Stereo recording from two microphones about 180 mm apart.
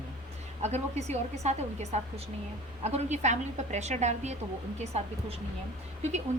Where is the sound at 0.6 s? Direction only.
40° right (ahead or behind).